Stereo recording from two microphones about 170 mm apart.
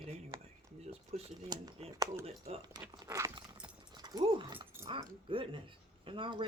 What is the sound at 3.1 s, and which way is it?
Dog, 20° right (ahead or behind).